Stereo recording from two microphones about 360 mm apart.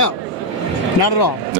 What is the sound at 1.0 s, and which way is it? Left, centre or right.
Speech, left.